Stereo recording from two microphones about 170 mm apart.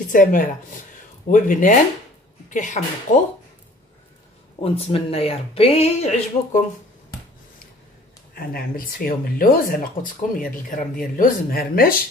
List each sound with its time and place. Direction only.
0.1 s speech: 50° left (ahead or behind)
4.6 s speech: 35° left (ahead or behind)
8.4 s speech: 60° left (ahead or behind)